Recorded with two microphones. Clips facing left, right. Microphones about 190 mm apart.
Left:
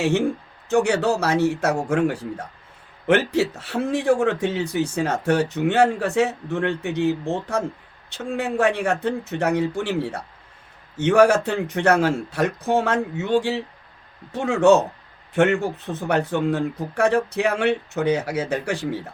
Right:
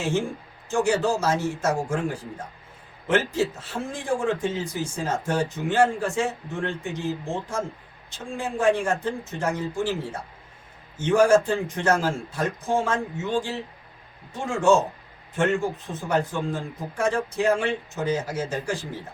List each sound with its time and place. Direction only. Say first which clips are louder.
0.7 s speech: left 3 dB; 65° left (ahead or behind)